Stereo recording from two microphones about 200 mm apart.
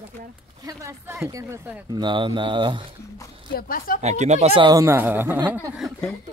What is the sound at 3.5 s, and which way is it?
Speech, 45° left (ahead or behind).